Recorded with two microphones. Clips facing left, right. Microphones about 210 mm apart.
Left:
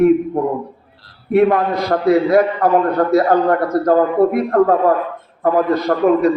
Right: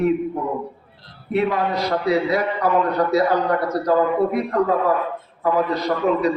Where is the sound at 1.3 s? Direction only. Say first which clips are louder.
Left 7 dB; 55° left (ahead or behind).